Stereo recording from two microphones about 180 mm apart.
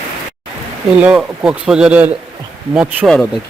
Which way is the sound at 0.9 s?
10° right (ahead or behind).